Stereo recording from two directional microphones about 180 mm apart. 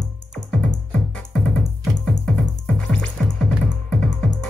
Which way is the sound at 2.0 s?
5° left (ahead or behind).